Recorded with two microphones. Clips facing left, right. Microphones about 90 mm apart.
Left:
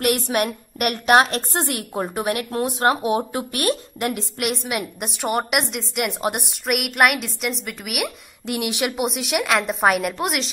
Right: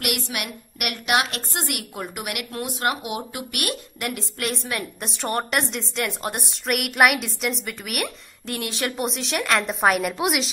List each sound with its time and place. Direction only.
0.0 s a woman's voice: 40° left (ahead or behind); by 6.4 s 20° left (ahead or behind)
6.6 s a woman's voice: 5° left (ahead or behind)
8.5 s a woman's voice: 15° left (ahead or behind); by 10.5 s 5° right (ahead or behind)